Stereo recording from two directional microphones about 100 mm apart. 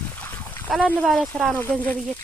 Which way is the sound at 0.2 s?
20° left (ahead or behind).